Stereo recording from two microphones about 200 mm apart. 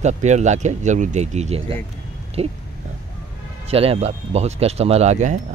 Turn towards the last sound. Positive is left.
turn(degrees=-35)  # may be behind; listen again after turning